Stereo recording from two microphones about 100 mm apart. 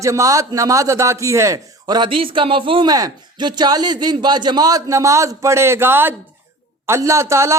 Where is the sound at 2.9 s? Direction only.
45° right (ahead or behind).